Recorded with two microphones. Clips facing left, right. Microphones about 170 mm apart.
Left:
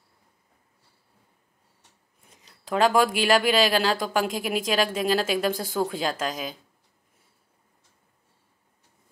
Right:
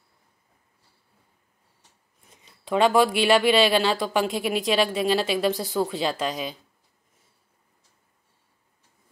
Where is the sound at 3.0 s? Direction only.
40° left (ahead or behind).